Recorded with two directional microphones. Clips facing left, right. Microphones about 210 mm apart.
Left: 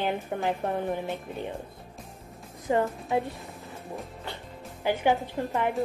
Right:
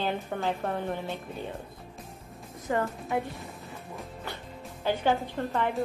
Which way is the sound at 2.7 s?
20° left (ahead or behind).